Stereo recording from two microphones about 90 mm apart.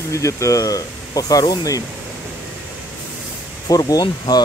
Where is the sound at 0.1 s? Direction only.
35° left (ahead or behind).